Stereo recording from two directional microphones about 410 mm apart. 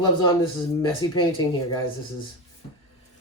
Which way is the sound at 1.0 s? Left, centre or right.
Centre.